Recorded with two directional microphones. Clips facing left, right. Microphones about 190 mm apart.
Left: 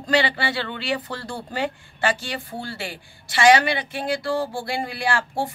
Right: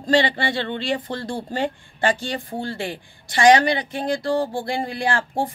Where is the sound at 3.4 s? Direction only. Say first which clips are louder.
Right 2 dB; 35° right (ahead or behind).